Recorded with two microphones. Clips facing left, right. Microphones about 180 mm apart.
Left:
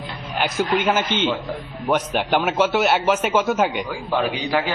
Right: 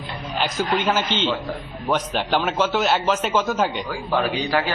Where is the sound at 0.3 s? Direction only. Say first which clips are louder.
Left 2 dB; 10° left (ahead or behind).